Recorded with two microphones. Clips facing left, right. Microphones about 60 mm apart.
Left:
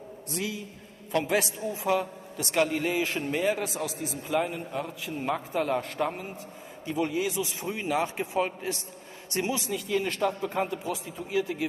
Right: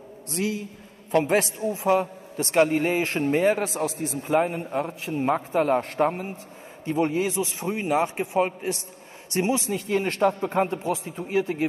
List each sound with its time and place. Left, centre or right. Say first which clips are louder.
0.3 s a man's voice: right 6 dB; right
9.7 s a man's voice: right 3 dB; right